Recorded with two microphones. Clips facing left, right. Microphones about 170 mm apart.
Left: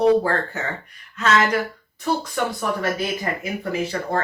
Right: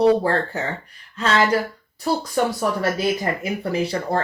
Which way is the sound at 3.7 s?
35° right (ahead or behind).